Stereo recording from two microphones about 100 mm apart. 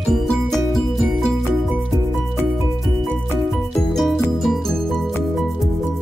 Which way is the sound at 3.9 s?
5° left (ahead or behind).